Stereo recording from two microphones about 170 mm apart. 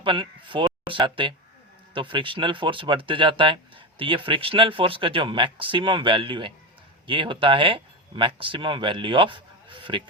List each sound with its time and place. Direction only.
0.0 s speech: 30° right (ahead or behind)